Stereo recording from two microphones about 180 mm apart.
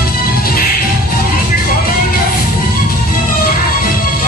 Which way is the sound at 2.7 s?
50° left (ahead or behind).